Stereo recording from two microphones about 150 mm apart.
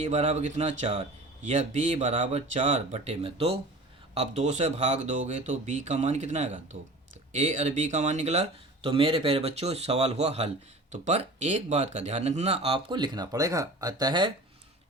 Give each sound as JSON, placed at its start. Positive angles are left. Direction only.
{"t": 0.0, "sound": "speech", "side_deg": -45}